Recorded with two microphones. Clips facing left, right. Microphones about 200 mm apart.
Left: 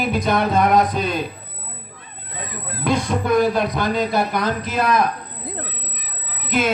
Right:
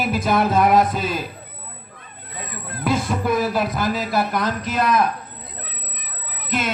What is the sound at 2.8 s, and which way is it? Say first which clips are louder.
A man's voice: left 1 dB; 5° right (ahead or behind).